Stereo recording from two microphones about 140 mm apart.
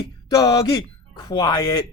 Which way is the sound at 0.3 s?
25° left (ahead or behind).